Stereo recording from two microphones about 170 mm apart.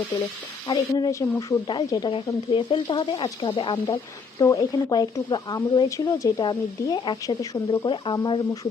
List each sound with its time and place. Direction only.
0.7 s speech: 20° left (ahead or behind)